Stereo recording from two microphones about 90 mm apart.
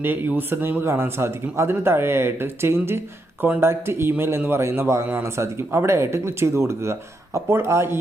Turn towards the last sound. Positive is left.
turn(degrees=-30)  # may be behind; listen again after turning